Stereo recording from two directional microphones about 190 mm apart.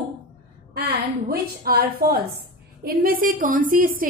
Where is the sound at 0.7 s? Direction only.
50° right (ahead or behind).